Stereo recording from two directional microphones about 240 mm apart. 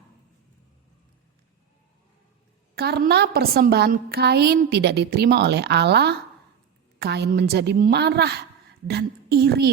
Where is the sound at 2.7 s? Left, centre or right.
Right.